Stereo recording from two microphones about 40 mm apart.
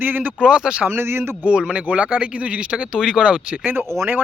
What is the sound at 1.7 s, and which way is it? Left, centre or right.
Speech, right.